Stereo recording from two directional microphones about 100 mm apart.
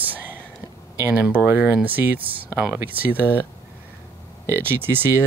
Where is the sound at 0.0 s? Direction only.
15° right (ahead or behind).